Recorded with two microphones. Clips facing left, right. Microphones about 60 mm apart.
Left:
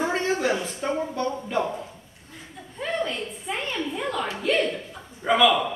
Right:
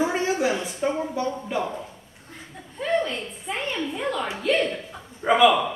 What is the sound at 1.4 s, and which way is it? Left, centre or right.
Speech, centre.